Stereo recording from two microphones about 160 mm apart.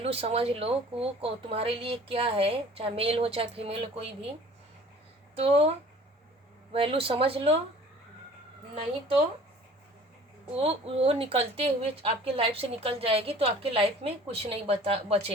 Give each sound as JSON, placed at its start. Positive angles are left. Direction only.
{"t": 0.0, "sound": "speech", "side_deg": -40}
{"t": 5.3, "sound": "speech", "side_deg": -40}
{"t": 6.7, "sound": "speech", "side_deg": -35}
{"t": 8.7, "sound": "speech", "side_deg": -40}
{"t": 10.5, "sound": "speech", "side_deg": -40}